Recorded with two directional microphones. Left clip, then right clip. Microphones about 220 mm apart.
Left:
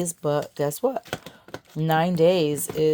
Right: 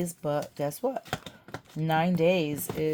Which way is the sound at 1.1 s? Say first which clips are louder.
Left 2 dB; 10° left (ahead or behind).